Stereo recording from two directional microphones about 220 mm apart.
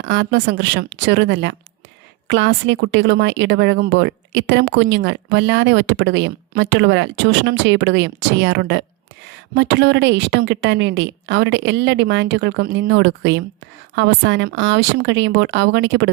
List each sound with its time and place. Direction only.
0.0 s a woman's voice: 55° right (ahead or behind)